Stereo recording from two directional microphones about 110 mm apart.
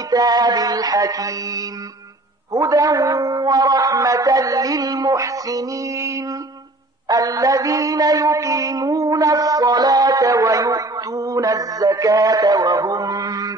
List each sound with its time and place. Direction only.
0.1 s speech: 35° right (ahead or behind)
7.1 s mantra: 35° right (ahead or behind)